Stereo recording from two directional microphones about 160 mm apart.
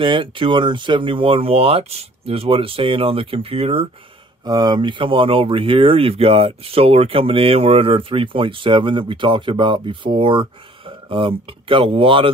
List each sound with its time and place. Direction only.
0.0 s speech: 30° right (ahead or behind)
4.5 s speech: 25° right (ahead or behind)